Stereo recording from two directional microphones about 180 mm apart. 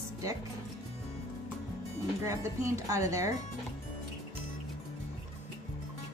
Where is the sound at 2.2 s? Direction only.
15° right (ahead or behind).